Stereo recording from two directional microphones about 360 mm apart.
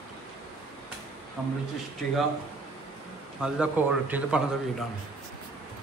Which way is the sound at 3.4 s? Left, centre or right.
Centre.